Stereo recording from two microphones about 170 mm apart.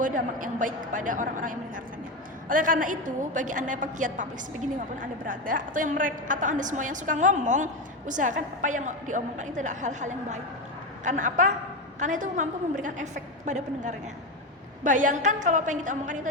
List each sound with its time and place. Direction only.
0.0 s a woman's voice: 50° right (ahead or behind)